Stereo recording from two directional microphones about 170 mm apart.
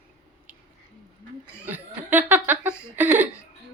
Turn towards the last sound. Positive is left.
turn(degrees=-10)  # may be behind; listen again after turning